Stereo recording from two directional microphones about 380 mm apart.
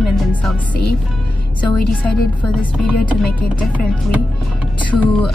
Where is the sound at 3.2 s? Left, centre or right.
Centre.